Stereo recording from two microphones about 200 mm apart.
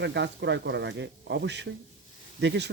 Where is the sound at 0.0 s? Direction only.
60° right (ahead or behind).